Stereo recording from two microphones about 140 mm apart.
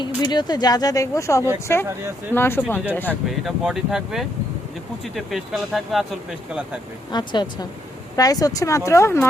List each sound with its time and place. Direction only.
0.0 s speech: 30° left (ahead or behind); by 3.2 s 15° left (ahead or behind)
3.4 s speech: centre (ahead or behind)
7.1 s speech: 30° left (ahead or behind)